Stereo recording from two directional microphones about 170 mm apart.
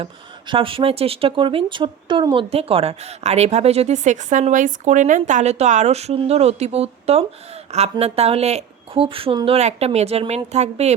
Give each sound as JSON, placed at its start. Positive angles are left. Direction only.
{"t": 0.0, "sound": "speech", "side_deg": -30}